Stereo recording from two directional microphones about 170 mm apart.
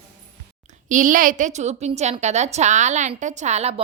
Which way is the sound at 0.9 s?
50° right (ahead or behind).